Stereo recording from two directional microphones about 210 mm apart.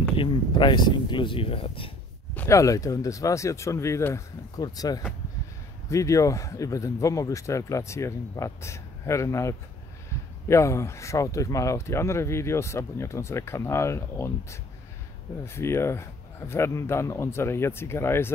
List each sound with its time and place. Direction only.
0.1 s speech: 25° left (ahead or behind)
2.3 s speech: 15° left (ahead or behind)